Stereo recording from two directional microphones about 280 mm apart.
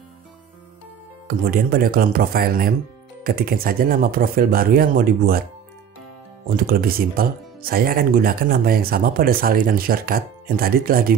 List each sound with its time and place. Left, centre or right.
1.2 s speech: right
6.5 s speech: right